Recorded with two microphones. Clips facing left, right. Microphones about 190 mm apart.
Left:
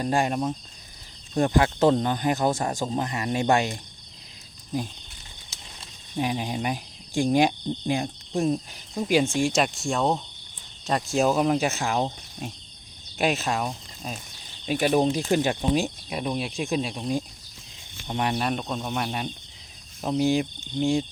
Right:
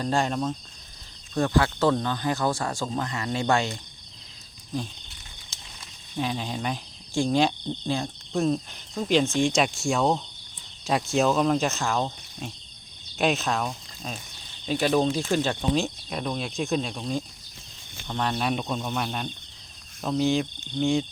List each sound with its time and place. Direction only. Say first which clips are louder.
0.0 s speech: left 1 dB; 15° left (ahead or behind)
6.1 s cricket: left 2 dB; 15° left (ahead or behind)
9.0 s speech: even; 10° left (ahead or behind)
11.3 s speech: left 2 dB; 10° left (ahead or behind)
13.1 s speech: even; 5° left (ahead or behind)
18.3 s speech: even; centre (ahead or behind)